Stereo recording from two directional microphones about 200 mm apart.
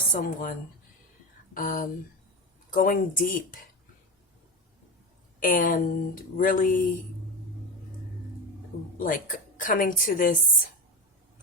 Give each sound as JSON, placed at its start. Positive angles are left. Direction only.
{"t": 0.2, "sound": "a woman's voice", "side_deg": 45}
{"t": 1.5, "sound": "a woman's voice", "side_deg": 45}
{"t": 5.4, "sound": "a woman's voice", "side_deg": 40}
{"t": 9.0, "sound": "a woman's voice", "side_deg": 40}